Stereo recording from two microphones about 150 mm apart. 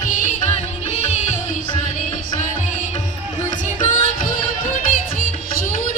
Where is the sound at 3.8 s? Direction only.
60° left (ahead or behind).